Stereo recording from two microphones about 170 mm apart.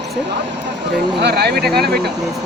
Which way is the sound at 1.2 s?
75° right (ahead or behind).